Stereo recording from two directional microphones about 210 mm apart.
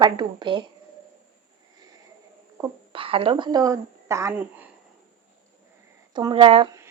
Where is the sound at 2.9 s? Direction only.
25° right (ahead or behind); by 4.7 s 10° right (ahead or behind).